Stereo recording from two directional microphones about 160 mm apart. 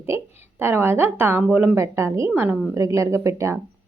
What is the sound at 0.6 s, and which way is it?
Speech, 15° right (ahead or behind).